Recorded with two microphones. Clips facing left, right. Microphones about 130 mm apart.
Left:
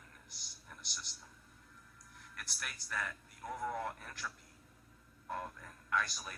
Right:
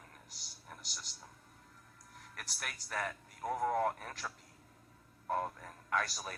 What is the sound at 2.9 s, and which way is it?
Speech, 40° right (ahead or behind).